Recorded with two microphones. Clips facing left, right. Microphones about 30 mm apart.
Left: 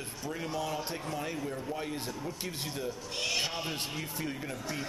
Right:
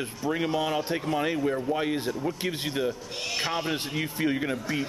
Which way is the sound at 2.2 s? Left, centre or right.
Right.